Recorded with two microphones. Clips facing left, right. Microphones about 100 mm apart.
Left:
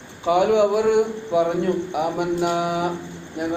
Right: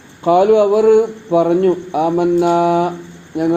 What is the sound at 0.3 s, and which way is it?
A man's voice, 55° right (ahead or behind).